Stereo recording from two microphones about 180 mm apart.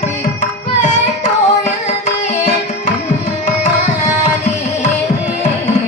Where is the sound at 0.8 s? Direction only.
40° left (ahead or behind).